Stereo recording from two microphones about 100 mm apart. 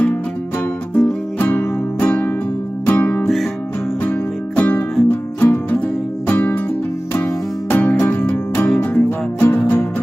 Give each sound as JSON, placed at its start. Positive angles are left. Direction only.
{"t": 0.9, "sound": "music", "side_deg": 15}
{"t": 7.7, "sound": "music", "side_deg": 15}
{"t": 8.6, "sound": "music", "side_deg": 5}
{"t": 9.4, "sound": "music", "side_deg": 20}